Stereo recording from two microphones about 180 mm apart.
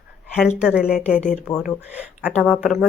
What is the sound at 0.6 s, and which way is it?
A woman's voice, 5° right (ahead or behind).